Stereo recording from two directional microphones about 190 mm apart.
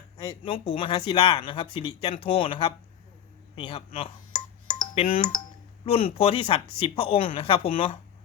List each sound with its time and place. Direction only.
0.2 s speech: 25° left (ahead or behind)
3.5 s telephone: 25° left (ahead or behind)
5.8 s speech: 30° left (ahead or behind)